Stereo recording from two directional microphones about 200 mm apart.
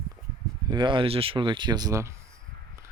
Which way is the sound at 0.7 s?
25° right (ahead or behind).